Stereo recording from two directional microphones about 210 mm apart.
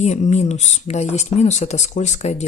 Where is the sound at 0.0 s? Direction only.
35° left (ahead or behind).